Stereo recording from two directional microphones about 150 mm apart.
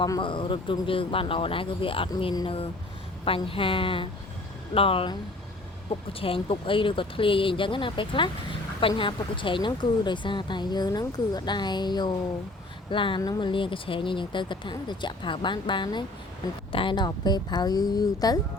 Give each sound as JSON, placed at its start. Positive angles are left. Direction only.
{"t": 0.0, "sound": "speech", "side_deg": 30}